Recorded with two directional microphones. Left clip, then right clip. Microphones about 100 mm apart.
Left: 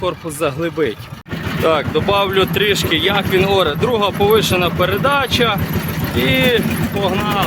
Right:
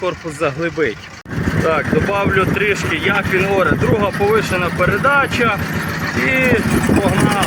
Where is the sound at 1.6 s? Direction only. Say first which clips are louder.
Left 2 dB; 35° left (ahead or behind).